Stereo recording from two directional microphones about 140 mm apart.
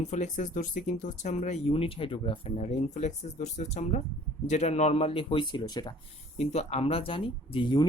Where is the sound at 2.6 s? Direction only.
55° left (ahead or behind); by 5.9 s 30° left (ahead or behind).